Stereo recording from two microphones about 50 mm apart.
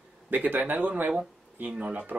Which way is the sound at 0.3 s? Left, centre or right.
Right.